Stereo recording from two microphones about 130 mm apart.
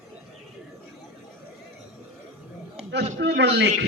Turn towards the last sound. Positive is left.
turn(degrees=-60)  # may be behind; listen again after turning